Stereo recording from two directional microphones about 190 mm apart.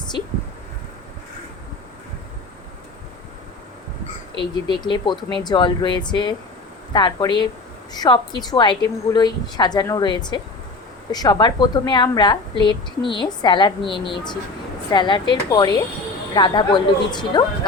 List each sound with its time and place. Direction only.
4.4 s a woman's voice: 25° left (ahead or behind)